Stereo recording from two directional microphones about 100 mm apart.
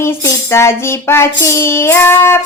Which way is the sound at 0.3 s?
25° left (ahead or behind).